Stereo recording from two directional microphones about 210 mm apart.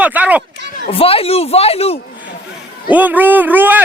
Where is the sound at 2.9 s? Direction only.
10° right (ahead or behind).